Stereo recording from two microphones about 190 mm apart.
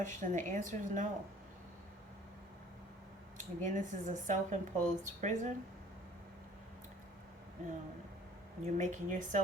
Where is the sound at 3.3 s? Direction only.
40° right (ahead or behind).